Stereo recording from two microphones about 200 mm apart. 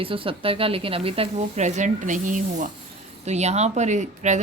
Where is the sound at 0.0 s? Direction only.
25° right (ahead or behind).